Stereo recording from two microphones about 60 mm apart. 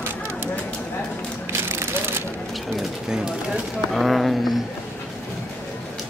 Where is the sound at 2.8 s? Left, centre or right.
Centre.